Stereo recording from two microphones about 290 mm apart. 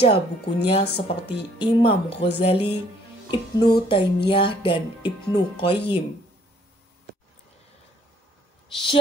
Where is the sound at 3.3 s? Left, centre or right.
Centre.